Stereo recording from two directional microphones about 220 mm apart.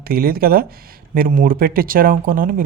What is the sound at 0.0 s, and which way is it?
Speech, 45° right (ahead or behind).